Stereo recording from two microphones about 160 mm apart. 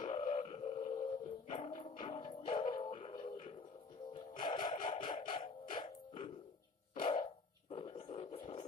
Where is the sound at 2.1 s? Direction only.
35° left (ahead or behind).